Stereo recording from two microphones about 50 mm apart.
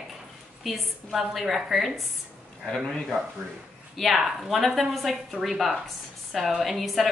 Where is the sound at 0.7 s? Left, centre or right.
Centre.